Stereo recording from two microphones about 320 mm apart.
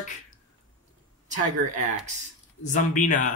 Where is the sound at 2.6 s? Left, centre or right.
Left.